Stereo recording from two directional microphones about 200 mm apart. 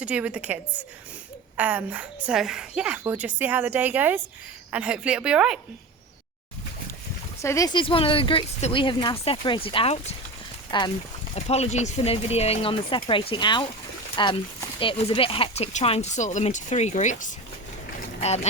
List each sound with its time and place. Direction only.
0.0 s a woman's voice: 5° right (ahead or behind)
7.4 s speech: 15° left (ahead or behind); by 17.3 s 40° left (ahead or behind)